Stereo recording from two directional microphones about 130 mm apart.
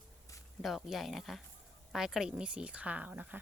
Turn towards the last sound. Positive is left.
turn(degrees=-10)  # may be behind; listen again after turning